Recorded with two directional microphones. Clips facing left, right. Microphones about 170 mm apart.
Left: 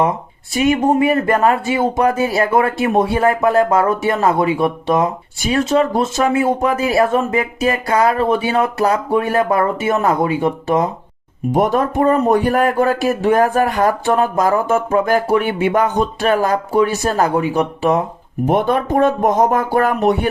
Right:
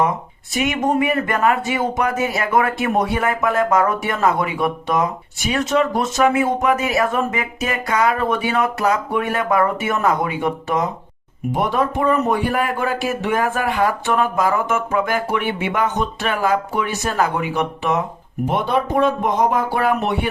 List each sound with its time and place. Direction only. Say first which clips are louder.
0.5 s speech: left 5 dB; 30° left (ahead or behind)
11.5 s speech: left 4 dB; 45° left (ahead or behind)
18.4 s speech: left 4 dB; 50° left (ahead or behind)